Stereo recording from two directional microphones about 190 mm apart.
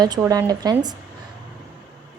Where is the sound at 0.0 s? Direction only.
20° right (ahead or behind).